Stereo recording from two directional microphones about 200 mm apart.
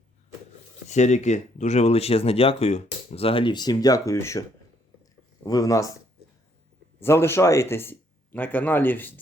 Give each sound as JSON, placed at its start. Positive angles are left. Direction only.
{"t": 0.9, "sound": "speech", "side_deg": 35}
{"t": 7.0, "sound": "speech", "side_deg": 10}